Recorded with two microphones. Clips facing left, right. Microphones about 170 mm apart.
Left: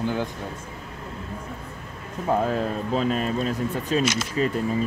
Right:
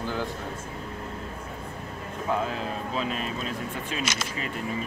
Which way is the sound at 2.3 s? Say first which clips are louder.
Left 6 dB; 45° left (ahead or behind).